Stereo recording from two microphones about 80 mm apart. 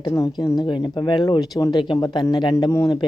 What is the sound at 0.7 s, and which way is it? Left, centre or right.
Speech, left.